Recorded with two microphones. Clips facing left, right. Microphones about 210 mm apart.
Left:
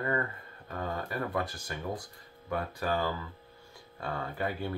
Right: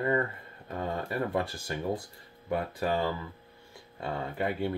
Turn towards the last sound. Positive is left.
turn(degrees=-20)  # may be behind; listen again after turning